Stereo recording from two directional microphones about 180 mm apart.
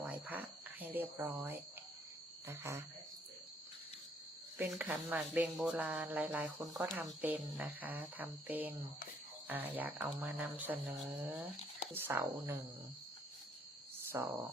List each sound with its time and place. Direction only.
0.0 s speech: 10° right (ahead or behind)
4.5 s speech: 10° right (ahead or behind)
14.1 s speech: 15° right (ahead or behind)